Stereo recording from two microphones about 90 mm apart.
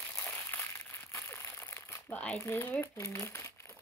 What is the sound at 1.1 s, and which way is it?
Crumpling, 25° left (ahead or behind).